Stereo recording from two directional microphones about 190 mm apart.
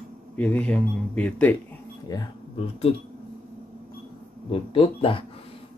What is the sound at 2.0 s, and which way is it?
Speech, 25° left (ahead or behind).